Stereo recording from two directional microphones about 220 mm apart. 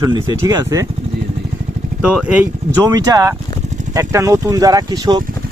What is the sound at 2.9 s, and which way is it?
Speech, 15° right (ahead or behind).